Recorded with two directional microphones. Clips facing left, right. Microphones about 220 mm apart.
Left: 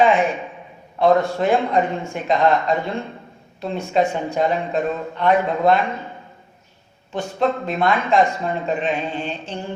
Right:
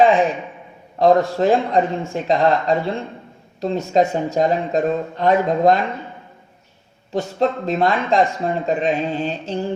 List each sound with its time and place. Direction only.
0.9 s speech: 35° right (ahead or behind)
7.1 s speech: 35° right (ahead or behind)